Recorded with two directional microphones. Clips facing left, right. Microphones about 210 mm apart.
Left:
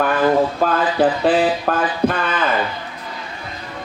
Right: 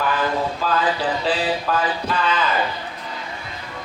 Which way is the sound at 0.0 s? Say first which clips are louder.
Left 6 dB; 55° left (ahead or behind).